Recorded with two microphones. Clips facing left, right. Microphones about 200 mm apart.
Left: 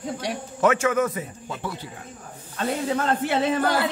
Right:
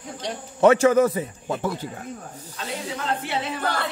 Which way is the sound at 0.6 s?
35° right (ahead or behind).